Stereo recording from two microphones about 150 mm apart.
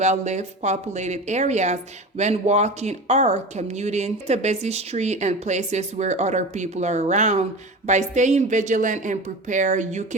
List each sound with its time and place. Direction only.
0.0 s a woman's voice: 50° right (ahead or behind)